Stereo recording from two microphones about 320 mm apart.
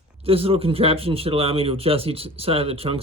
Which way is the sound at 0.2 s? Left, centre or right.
Centre.